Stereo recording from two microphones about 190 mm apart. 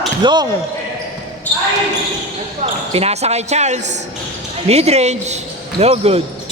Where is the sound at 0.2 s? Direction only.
25° right (ahead or behind).